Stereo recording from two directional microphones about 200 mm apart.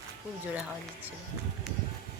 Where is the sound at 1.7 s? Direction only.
Centre (ahead or behind).